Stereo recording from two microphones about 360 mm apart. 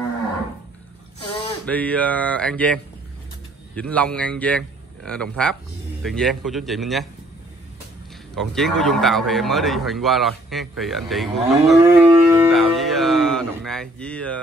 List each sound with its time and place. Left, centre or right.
1.7 s a man's voice: centre
8.4 s speech: centre